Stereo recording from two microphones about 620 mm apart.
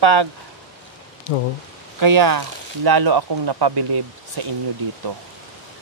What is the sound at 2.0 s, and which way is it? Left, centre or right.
A man's voice, right.